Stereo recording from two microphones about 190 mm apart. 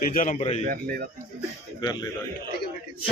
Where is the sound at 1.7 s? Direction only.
20° left (ahead or behind).